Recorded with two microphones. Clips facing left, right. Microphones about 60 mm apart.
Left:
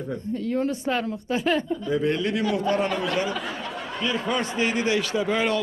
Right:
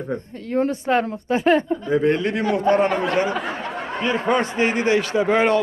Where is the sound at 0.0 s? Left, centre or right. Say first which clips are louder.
Even; right.